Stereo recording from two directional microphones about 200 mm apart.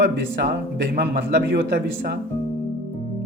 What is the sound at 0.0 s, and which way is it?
A man's voice, 55° right (ahead or behind).